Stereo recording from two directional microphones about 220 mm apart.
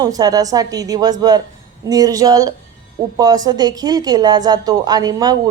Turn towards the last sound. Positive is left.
turn(degrees=-15)  # may be behind; listen again after turning